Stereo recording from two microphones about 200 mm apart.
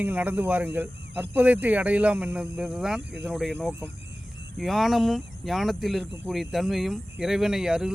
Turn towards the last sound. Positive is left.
turn(degrees=-5)  # may be behind; listen again after turning